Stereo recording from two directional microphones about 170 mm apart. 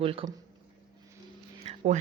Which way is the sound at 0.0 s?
30° right (ahead or behind).